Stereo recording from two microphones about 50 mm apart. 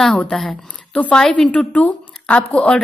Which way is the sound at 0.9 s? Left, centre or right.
Left.